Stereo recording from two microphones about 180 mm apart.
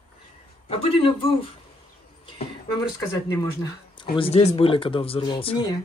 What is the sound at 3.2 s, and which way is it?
Speech, 20° left (ahead or behind).